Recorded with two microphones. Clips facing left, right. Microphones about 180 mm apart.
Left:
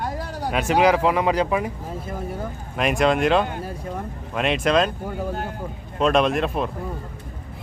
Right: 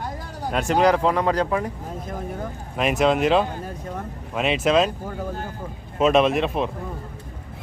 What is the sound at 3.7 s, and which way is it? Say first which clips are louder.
Speech: left 1 dB; 5° left (ahead or behind).